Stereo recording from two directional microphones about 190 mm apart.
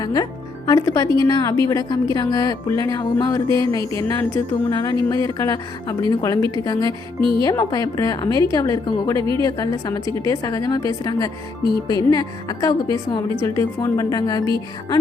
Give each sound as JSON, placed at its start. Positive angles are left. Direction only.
{"t": 0.0, "sound": "a woman's voice", "side_deg": 20}
{"t": 7.2, "sound": "a woman's voice", "side_deg": -25}
{"t": 7.4, "sound": "a woman's voice", "side_deg": 20}
{"t": 9.1, "sound": "a woman's voice", "side_deg": -25}
{"t": 9.4, "sound": "a woman's voice", "side_deg": 20}